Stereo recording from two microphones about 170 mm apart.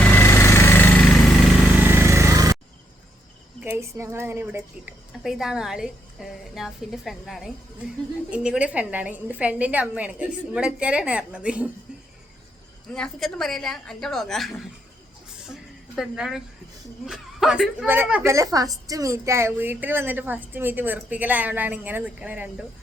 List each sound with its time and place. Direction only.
0.0 s vehicle: 10° left (ahead or behind)
1.7 s vehicle: 10° right (ahead or behind)
3.6 s a woman's voice: 15° right (ahead or behind)
5.2 s a woman's voice: centre (ahead or behind)
12.9 s a woman's voice: 5° left (ahead or behind)
16.0 s a woman's voice: 5° right (ahead or behind)